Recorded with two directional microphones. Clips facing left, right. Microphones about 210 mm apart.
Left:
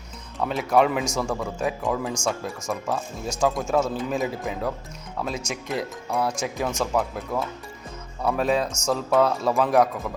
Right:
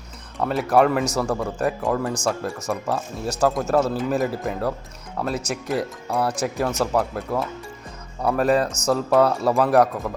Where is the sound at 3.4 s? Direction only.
Centre (ahead or behind).